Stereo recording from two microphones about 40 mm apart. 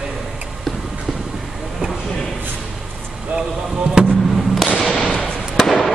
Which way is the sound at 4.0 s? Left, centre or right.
Centre.